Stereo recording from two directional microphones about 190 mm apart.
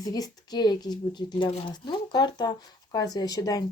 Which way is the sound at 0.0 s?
20° left (ahead or behind).